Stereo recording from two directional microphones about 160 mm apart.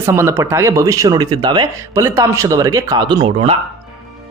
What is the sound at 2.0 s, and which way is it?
A man's voice, 15° right (ahead or behind).